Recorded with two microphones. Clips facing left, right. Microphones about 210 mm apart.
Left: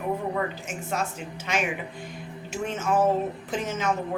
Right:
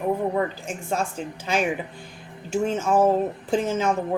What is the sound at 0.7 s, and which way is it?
A woman's voice, 30° right (ahead or behind).